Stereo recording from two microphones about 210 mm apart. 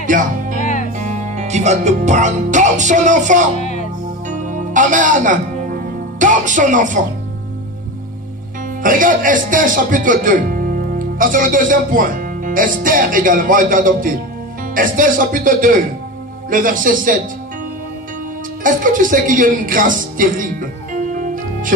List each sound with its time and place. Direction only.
0.0 s music: 40° right (ahead or behind)
0.6 s music: 40° left (ahead or behind)
0.9 s speech: 35° right (ahead or behind)
3.5 s music: 35° left (ahead or behind)
4.3 s music: 35° right (ahead or behind)
8.8 s speech: 40° right (ahead or behind)
18.6 s speech: 40° right (ahead or behind)